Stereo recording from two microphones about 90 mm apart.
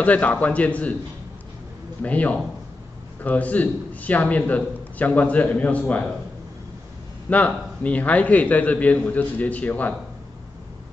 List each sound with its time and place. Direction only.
0.0 s a man's voice: 15° left (ahead or behind)
2.0 s a man's voice: 15° left (ahead or behind)
7.2 s a man's voice: 15° left (ahead or behind)